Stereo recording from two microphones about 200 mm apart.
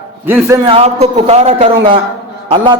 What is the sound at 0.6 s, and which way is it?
A man's voice, 30° right (ahead or behind).